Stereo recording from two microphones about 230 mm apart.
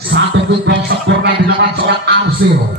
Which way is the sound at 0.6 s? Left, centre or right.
Right.